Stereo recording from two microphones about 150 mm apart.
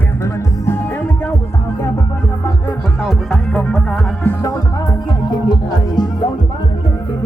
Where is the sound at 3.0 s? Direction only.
Centre (ahead or behind).